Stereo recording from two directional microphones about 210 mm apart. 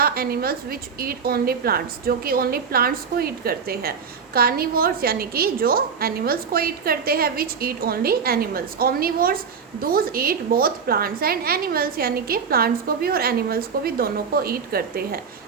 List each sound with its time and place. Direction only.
0.0 s a woman's voice: 45° right (ahead or behind)